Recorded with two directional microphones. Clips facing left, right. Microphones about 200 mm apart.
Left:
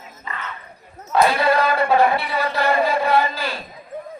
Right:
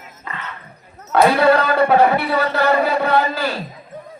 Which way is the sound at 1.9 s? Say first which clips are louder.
Right 3 dB; 70° right (ahead or behind).